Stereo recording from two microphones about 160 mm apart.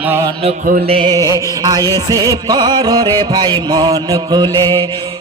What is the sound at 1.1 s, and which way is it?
Music, 20° right (ahead or behind).